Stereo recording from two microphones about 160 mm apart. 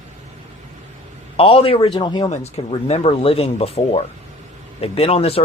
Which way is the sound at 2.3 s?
40° left (ahead or behind).